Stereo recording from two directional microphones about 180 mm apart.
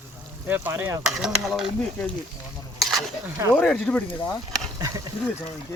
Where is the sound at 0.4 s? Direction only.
10° right (ahead or behind).